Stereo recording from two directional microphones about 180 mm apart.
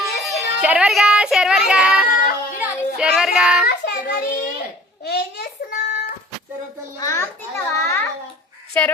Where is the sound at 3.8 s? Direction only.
60° left (ahead or behind).